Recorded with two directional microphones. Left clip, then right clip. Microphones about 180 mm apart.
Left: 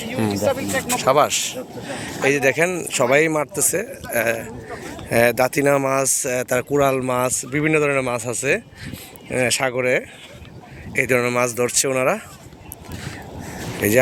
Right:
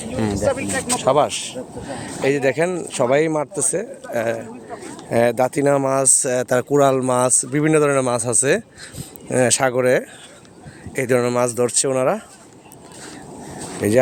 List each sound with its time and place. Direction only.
0.0 s a sound: centre (ahead or behind)
0.5 s speech: 20° left (ahead or behind)
1.0 s speech: 20° right (ahead or behind)
13.8 s speech: 15° right (ahead or behind)